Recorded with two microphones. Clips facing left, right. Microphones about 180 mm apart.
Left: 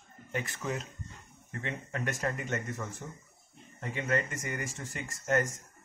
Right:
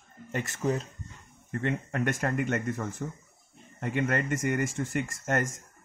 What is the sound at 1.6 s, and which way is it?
Speech, 50° right (ahead or behind).